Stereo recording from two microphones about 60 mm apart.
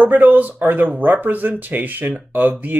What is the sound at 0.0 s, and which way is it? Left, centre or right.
Speech, right.